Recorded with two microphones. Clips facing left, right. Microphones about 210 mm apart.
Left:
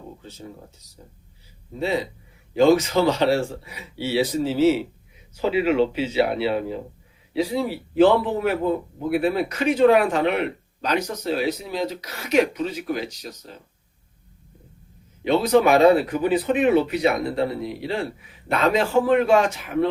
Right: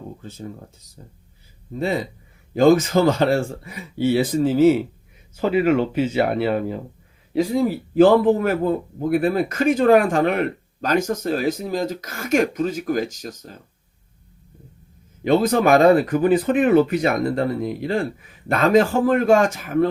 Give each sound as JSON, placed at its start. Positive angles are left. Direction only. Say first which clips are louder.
{"t": 2.6, "sound": "speech", "louder": "right 2 dB", "side_deg": -45}
{"t": 15.2, "sound": "speech", "louder": "right 1 dB", "side_deg": -45}